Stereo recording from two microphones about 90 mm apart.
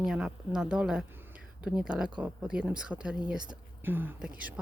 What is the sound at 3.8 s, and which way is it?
Speech, 20° right (ahead or behind).